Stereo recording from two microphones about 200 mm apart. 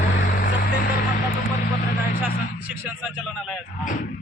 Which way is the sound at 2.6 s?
10° right (ahead or behind).